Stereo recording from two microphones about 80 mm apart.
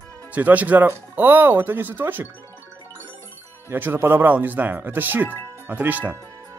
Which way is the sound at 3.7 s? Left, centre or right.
Right.